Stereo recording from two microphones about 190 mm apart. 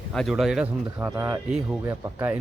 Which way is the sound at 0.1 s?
Centre (ahead or behind).